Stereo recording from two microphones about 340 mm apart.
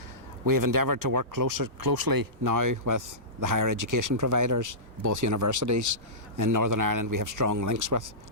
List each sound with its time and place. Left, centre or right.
0.4 s speech: right